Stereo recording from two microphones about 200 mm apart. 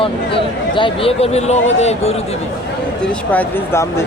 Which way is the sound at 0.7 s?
25° left (ahead or behind).